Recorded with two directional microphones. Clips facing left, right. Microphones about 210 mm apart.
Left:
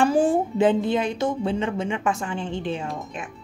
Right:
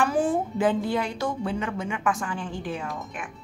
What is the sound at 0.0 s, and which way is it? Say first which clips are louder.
A woman's voice: left 4 dB; 30° left (ahead or behind).